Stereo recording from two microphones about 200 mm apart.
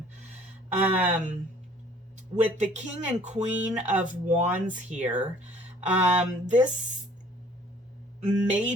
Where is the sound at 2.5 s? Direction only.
35° right (ahead or behind).